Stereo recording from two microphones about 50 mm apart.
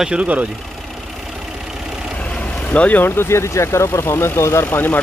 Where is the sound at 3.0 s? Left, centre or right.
Left.